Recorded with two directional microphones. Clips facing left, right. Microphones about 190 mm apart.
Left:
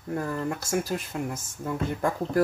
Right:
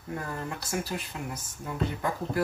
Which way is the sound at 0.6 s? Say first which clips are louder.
Left 5 dB; 45° left (ahead or behind).